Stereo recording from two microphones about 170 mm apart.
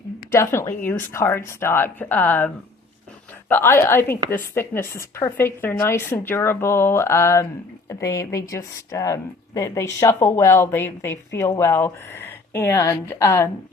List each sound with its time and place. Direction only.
0.3 s a woman's voice: 15° left (ahead or behind)
3.5 s a woman's voice: 15° left (ahead or behind)